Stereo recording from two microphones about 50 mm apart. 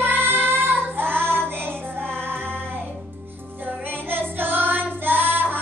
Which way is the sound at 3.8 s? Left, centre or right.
Right.